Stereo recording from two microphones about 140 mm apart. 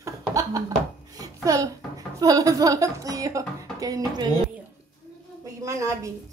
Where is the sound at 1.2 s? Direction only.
25° right (ahead or behind).